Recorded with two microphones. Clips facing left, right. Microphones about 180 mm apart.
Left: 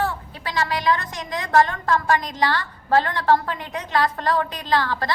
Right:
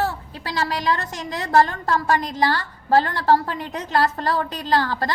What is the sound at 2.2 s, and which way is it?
Speech, 10° right (ahead or behind).